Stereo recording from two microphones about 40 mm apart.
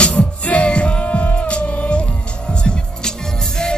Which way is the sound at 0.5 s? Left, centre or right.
Left.